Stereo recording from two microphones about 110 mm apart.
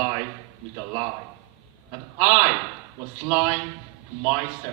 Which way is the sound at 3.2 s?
40° right (ahead or behind).